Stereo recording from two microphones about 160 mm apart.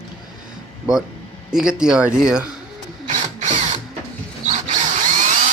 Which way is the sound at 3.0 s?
50° right (ahead or behind).